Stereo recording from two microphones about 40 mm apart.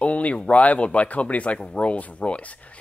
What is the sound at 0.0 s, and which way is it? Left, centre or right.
Speech, left.